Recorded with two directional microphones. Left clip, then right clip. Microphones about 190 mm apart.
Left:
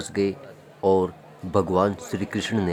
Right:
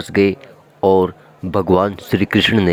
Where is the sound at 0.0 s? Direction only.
30° right (ahead or behind).